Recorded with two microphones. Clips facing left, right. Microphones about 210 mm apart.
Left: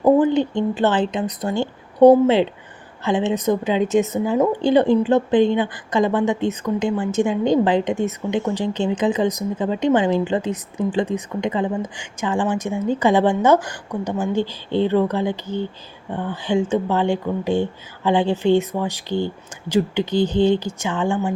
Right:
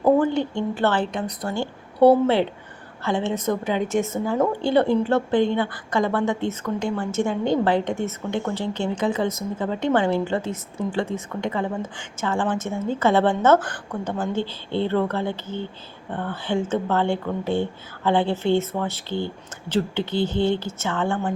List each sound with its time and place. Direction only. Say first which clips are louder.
0.2 s a woman's voice: left 4 dB; 20° left (ahead or behind)